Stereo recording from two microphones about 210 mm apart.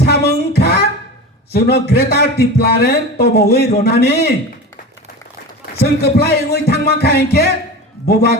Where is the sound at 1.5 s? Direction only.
50° left (ahead or behind).